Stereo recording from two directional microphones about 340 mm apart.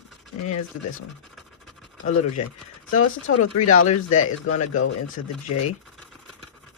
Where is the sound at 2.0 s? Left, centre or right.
Left.